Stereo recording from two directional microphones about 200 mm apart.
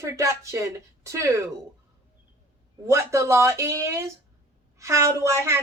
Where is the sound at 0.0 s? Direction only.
15° right (ahead or behind).